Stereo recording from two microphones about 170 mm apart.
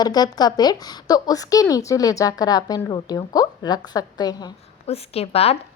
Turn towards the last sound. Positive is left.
turn(degrees=35)  # may be behind; listen again after turning